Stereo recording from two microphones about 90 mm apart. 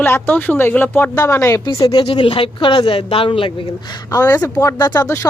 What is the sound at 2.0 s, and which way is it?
A woman's voice, 80° left.